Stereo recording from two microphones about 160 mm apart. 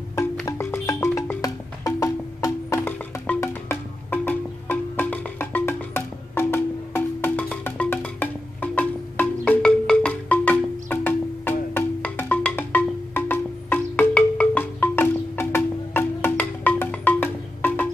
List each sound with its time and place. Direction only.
0.1 s music: 20° left (ahead or behind)